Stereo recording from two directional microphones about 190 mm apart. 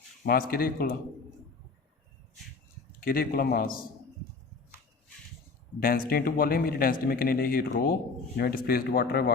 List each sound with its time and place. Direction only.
0.3 s speech: 50° left (ahead or behind)
3.0 s speech: 50° left (ahead or behind)
5.8 s speech: 50° left (ahead or behind)